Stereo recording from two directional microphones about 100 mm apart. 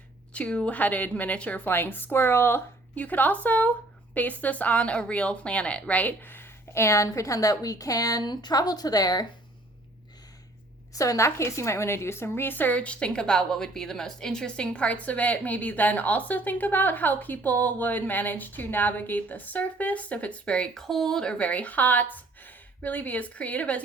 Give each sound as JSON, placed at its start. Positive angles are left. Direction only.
{"t": 0.3, "sound": "a woman's voice", "side_deg": 10}
{"t": 10.9, "sound": "a woman's voice", "side_deg": 35}